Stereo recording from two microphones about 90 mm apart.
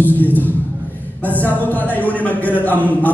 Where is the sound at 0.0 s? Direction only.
20° left (ahead or behind).